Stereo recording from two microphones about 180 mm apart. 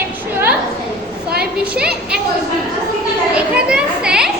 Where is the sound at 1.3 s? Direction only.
60° right (ahead or behind).